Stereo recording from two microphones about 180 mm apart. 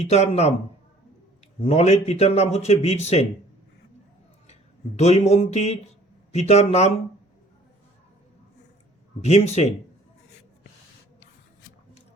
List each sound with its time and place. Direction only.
0.0 s speech: 35° left (ahead or behind)
1.6 s speech: 35° left (ahead or behind)
4.9 s speech: 40° left (ahead or behind)
9.2 s speech: 35° left (ahead or behind)